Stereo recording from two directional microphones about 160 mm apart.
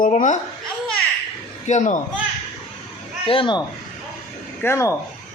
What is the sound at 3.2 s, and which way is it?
Speech, 35° left (ahead or behind).